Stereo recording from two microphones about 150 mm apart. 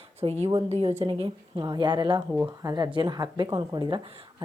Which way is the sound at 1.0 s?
35° right (ahead or behind).